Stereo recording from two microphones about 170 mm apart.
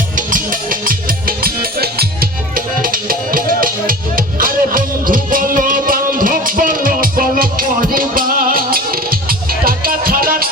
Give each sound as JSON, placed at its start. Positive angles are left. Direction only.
{"t": 0.2, "sound": "music", "side_deg": -55}